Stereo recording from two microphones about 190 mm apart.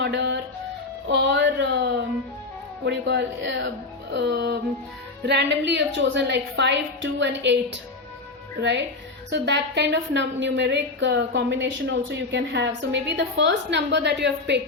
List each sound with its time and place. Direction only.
0.0 s a woman's voice: 70° right (ahead or behind)
4.1 s music: 65° right (ahead or behind)
5.2 s a woman's voice: 65° right (ahead or behind)
9.3 s a woman's voice: 65° right (ahead or behind)